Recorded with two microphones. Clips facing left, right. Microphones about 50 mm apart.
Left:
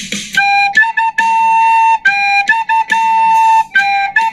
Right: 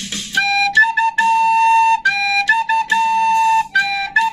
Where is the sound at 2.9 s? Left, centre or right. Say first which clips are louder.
Left 4 dB; left.